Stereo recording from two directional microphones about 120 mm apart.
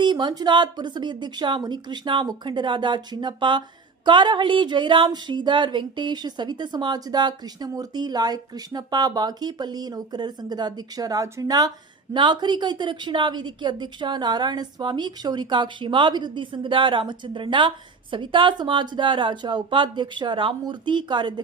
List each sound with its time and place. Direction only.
0.0 s a woman's voice: 40° right (ahead or behind)